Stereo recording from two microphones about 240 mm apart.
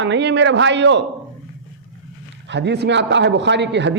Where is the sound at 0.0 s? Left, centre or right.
Right.